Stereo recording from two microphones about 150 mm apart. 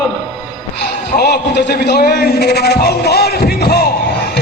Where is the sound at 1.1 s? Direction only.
90° left.